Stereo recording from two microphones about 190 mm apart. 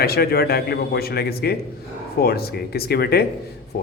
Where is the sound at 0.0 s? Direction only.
55° left (ahead or behind).